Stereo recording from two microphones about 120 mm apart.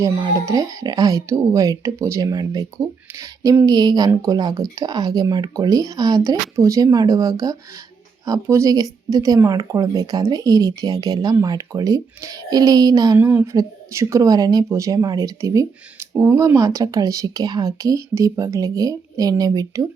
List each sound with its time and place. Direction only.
0.4 s a woman's voice: 30° right (ahead or behind)
3.1 s a woman's voice: 25° right (ahead or behind)
13.1 s a woman's voice: 15° right (ahead or behind)